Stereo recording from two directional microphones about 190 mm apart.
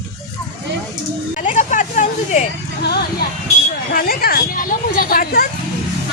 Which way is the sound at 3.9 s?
50° left (ahead or behind).